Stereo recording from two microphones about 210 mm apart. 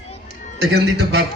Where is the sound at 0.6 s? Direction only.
50° right (ahead or behind).